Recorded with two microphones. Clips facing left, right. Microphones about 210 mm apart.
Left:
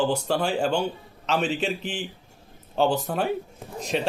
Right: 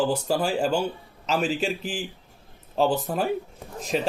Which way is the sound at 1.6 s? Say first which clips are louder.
Even; 5° right (ahead or behind).